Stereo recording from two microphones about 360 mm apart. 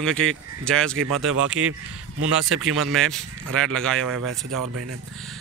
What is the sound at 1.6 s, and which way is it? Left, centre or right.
Speech, right.